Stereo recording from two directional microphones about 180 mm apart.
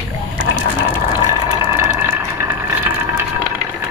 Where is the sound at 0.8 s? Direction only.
15° right (ahead or behind).